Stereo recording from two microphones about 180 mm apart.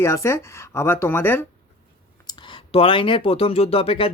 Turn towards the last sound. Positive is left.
turn(degrees=30)  # may be behind; listen again after turning